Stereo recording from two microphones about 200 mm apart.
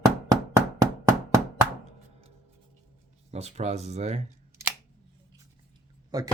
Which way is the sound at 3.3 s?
30° right (ahead or behind).